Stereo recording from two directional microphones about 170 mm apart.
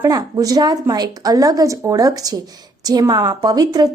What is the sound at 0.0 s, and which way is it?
A woman's voice, 20° right (ahead or behind).